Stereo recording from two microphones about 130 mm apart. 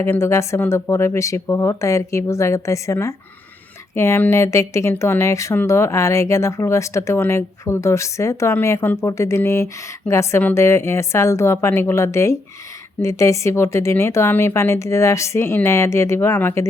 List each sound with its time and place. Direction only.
0.0 s speech: 20° left (ahead or behind)